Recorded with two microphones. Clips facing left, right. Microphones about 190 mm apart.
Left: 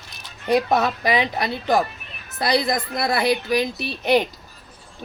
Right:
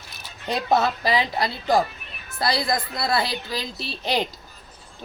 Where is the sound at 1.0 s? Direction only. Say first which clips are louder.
Left 1 dB; 20° left (ahead or behind).